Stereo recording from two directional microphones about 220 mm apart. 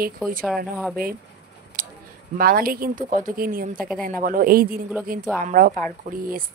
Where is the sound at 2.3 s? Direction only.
40° right (ahead or behind).